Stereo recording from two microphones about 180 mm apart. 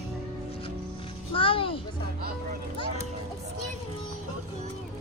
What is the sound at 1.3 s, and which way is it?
Speech, 30° left (ahead or behind).